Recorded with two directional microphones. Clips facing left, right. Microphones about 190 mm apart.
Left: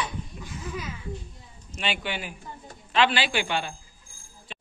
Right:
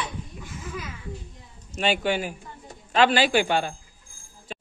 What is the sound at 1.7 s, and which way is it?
A man's voice, 45° right (ahead or behind).